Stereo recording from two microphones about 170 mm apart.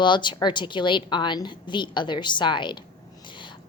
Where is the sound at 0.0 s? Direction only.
25° left (ahead or behind).